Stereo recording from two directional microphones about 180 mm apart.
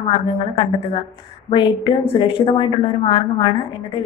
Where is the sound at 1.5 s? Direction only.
25° left (ahead or behind).